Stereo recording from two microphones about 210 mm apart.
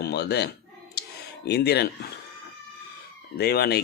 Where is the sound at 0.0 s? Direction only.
50° left (ahead or behind).